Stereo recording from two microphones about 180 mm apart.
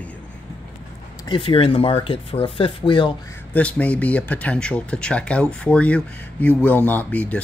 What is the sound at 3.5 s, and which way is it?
Speech, 10° left (ahead or behind).